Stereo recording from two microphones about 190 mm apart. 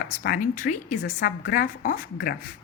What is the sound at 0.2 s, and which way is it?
A woman's voice, 50° left (ahead or behind).